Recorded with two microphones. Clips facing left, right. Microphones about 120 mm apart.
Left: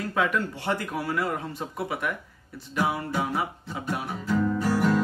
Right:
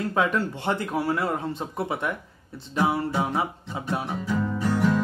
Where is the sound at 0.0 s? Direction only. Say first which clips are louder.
Right 2 dB; 30° right (ahead or behind).